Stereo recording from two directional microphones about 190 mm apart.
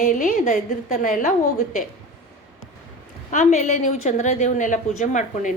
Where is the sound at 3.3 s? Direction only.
40° left (ahead or behind).